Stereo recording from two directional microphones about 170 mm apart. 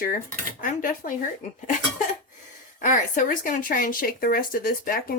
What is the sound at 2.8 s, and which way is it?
Speech, 50° left (ahead or behind).